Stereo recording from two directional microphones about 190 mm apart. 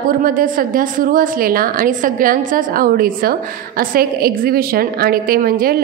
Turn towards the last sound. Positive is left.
turn(degrees=-50)  # may be behind; listen again after turning